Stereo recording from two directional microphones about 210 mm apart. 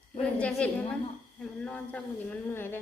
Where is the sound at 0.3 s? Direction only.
5° left (ahead or behind).